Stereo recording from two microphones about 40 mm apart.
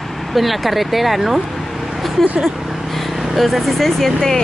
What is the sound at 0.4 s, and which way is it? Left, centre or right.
Speech, centre.